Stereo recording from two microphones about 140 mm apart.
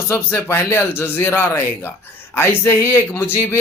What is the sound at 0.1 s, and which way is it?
A man's voice, 15° left (ahead or behind).